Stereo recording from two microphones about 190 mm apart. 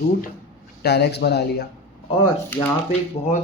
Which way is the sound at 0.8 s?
60° left (ahead or behind).